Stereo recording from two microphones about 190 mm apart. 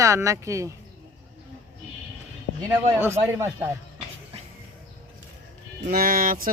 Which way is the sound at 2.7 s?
10° right (ahead or behind).